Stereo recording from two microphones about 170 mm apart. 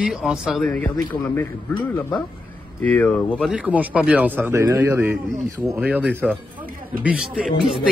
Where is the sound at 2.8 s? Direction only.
10° left (ahead or behind).